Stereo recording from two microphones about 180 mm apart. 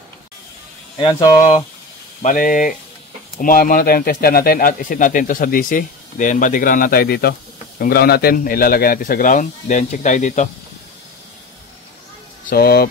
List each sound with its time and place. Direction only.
0.9 s speech: 20° left (ahead or behind)
2.2 s speech: 50° left (ahead or behind)
12.4 s speech: 60° left (ahead or behind)